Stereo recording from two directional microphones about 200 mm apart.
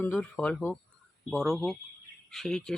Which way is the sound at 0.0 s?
5° left (ahead or behind).